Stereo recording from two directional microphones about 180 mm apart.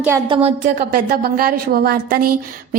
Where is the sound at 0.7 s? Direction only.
60° right (ahead or behind).